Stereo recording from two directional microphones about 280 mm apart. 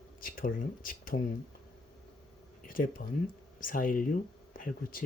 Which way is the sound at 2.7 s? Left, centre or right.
Left.